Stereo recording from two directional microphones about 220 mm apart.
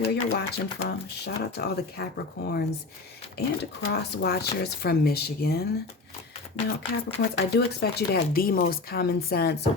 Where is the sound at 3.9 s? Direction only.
45° left (ahead or behind).